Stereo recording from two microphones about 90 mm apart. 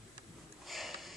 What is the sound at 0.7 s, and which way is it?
Sniff, centre (ahead or behind).